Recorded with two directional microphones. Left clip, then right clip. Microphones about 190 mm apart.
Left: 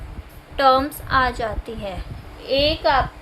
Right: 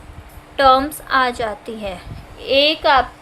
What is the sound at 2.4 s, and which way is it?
Speech, 35° right (ahead or behind).